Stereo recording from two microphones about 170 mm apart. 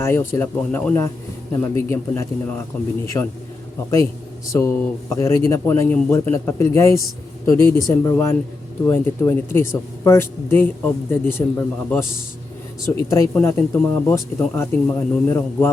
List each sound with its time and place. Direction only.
0.0 s a man's voice: 15° left (ahead or behind)
4.5 s speech: 15° left (ahead or behind)